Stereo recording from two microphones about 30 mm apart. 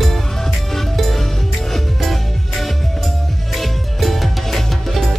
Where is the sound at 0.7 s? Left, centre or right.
Centre.